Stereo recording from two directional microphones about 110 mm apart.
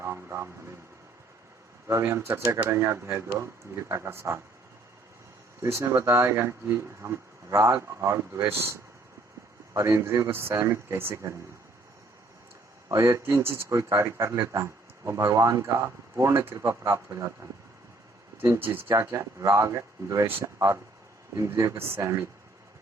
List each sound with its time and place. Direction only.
0.0 s vehicle: 25° right (ahead or behind)
1.9 s speech: 25° right (ahead or behind)
5.6 s speech: 25° right (ahead or behind)
12.9 s speech: 30° right (ahead or behind)
18.3 s speech: 25° right (ahead or behind)